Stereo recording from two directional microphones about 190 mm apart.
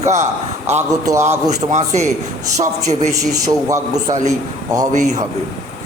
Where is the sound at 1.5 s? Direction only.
35° right (ahead or behind).